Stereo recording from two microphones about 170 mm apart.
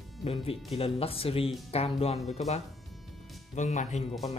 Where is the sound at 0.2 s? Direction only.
35° left (ahead or behind).